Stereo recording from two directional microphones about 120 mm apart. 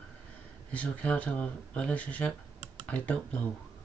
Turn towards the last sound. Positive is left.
turn(degrees=10)  # may be behind; listen again after turning